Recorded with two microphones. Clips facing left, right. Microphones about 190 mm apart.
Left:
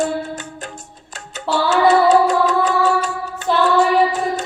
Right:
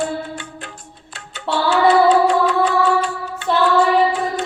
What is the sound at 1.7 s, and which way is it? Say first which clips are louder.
Music: even; 45° left (ahead or behind).